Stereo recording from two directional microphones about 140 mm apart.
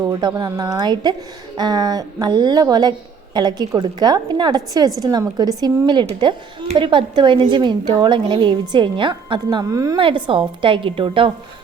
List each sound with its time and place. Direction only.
0.0 s a woman's voice: 30° right (ahead or behind)
10.0 s a woman's voice: 35° right (ahead or behind)